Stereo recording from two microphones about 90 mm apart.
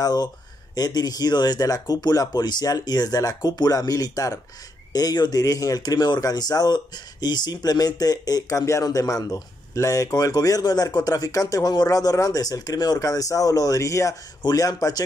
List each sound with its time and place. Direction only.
0.0 s speech: 50° left (ahead or behind)